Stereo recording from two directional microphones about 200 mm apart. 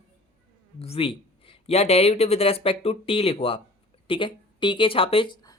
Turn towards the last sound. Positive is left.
turn(degrees=20)  # may be behind; listen again after turning